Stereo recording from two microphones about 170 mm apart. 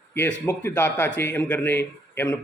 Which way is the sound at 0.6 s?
10° left (ahead or behind).